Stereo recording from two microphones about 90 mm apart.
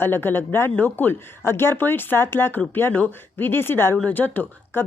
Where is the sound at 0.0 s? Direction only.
25° left (ahead or behind).